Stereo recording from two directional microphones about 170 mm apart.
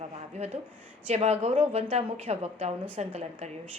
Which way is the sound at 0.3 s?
40° right (ahead or behind).